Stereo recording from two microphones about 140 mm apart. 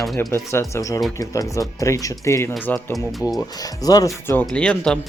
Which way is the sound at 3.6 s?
25° left (ahead or behind).